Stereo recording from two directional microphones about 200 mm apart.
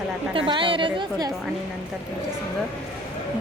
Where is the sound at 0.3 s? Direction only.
25° right (ahead or behind).